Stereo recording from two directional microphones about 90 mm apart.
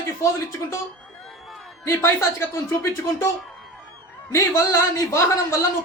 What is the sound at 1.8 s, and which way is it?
A man's voice, 30° left (ahead or behind).